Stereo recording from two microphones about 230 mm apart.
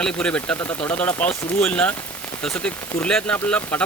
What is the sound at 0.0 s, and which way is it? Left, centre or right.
Speech, centre.